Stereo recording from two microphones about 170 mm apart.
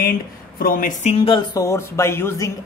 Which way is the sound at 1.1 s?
30° left (ahead or behind).